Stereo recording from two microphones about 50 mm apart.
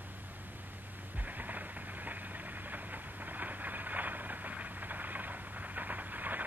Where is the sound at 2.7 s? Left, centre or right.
Right.